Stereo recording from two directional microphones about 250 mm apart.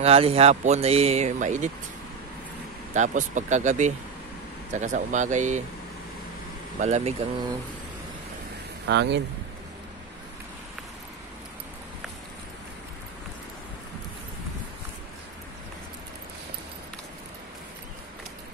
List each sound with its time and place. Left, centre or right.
0.0 s speech: right
2.9 s speech: right
6.8 s speech: right
8.8 s speech: right